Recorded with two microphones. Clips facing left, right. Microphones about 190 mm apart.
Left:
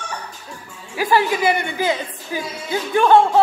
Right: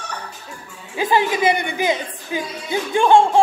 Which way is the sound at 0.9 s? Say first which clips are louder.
Even; 20° right (ahead or behind).